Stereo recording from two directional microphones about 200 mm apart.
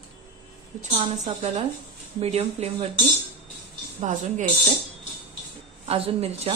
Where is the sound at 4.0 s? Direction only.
40° right (ahead or behind).